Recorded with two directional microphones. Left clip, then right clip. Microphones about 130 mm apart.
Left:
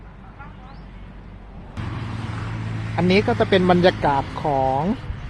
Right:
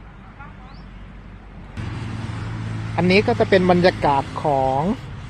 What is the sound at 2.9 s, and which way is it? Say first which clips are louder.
Speech: right 2 dB; 15° right (ahead or behind).